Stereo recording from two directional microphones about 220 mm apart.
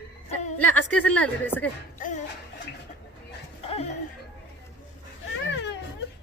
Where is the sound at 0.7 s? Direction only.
5° left (ahead or behind).